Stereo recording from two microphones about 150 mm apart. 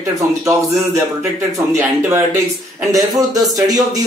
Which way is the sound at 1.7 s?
20° right (ahead or behind).